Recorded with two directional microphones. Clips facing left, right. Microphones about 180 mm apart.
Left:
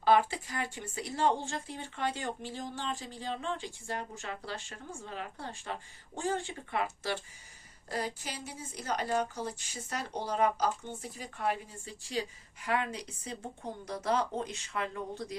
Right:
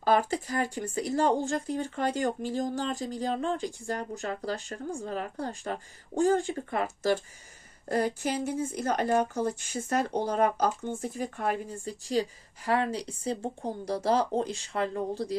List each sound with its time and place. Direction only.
0.0 s speech: 40° right (ahead or behind)
7.9 s speech: 50° right (ahead or behind); by 15.4 s 35° right (ahead or behind)